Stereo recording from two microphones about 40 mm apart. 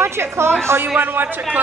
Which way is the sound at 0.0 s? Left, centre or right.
Right.